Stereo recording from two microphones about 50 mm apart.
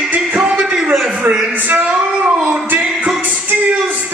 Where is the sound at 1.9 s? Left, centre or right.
Right.